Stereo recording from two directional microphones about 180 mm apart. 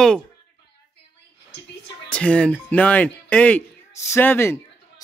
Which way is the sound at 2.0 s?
5° left (ahead or behind).